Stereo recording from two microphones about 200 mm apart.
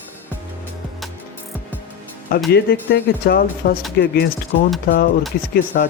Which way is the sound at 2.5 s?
55° left (ahead or behind).